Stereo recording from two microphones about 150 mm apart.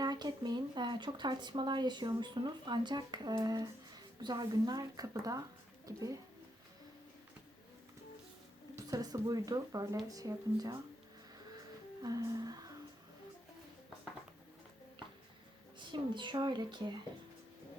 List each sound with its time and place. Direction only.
0.0 s speech: 25° right (ahead or behind)
8.7 s speech: 25° right (ahead or behind)
12.0 s speech: 25° right (ahead or behind)
15.8 s speech: 30° right (ahead or behind)